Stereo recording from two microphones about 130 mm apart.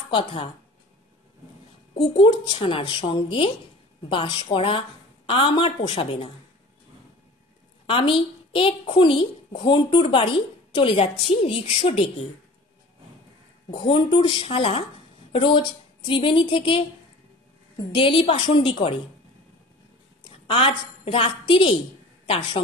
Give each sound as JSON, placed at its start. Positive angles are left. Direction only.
{"t": 0.1, "sound": "a woman's voice", "side_deg": 40}
{"t": 2.0, "sound": "a woman's voice", "side_deg": 35}
{"t": 7.9, "sound": "a woman's voice", "side_deg": 40}
{"t": 13.7, "sound": "a woman's voice", "side_deg": 35}
{"t": 20.4, "sound": "a woman's voice", "side_deg": 45}